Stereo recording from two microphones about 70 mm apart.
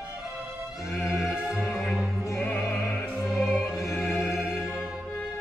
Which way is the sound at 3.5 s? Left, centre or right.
Centre.